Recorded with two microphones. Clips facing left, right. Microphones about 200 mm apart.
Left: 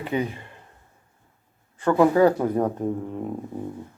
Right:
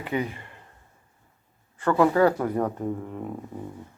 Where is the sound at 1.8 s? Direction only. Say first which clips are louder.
Left 2 dB; 15° left (ahead or behind).